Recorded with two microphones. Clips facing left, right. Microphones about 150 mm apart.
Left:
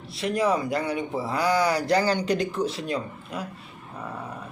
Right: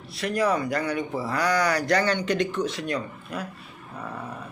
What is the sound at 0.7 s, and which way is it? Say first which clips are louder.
Speech: even; 25° left (ahead or behind).